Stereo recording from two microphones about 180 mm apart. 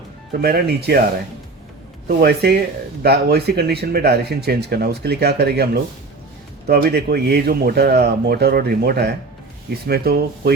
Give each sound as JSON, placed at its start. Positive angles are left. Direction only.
{"t": 0.4, "sound": "speech", "side_deg": -60}
{"t": 2.0, "sound": "speech", "side_deg": -60}